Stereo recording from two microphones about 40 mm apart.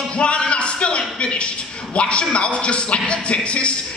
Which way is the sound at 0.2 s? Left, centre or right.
Left.